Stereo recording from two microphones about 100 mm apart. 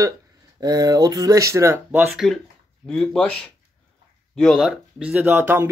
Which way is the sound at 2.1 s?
Centre (ahead or behind).